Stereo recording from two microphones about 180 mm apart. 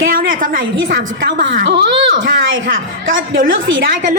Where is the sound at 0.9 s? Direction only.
55° right (ahead or behind); by 3.2 s 75° right (ahead or behind).